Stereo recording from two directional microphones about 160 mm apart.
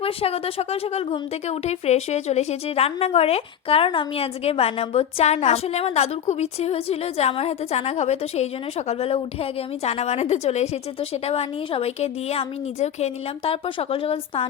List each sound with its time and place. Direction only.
0.0 s a woman's voice: 35° left (ahead or behind)